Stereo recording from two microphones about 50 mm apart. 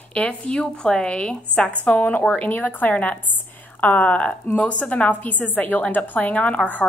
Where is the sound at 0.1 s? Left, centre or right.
Left.